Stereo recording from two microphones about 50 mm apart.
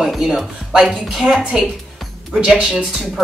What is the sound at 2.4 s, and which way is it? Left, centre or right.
Speech, right.